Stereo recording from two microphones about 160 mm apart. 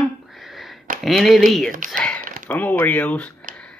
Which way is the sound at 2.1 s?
60° right (ahead or behind).